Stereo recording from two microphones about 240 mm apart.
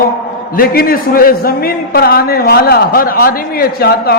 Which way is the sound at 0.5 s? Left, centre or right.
Left.